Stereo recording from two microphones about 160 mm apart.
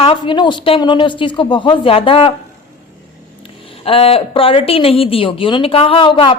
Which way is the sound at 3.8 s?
35° left (ahead or behind).